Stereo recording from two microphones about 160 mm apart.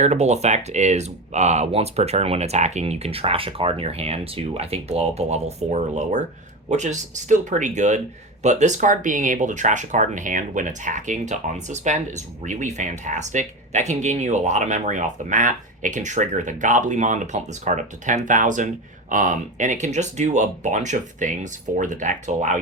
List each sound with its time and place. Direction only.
0.0 s speech: 45° right (ahead or behind)